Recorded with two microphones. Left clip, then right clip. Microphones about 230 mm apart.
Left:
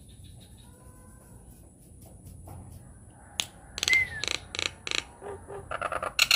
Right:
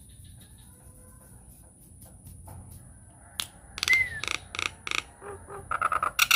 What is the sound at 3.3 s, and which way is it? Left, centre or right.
Finger snapping, centre.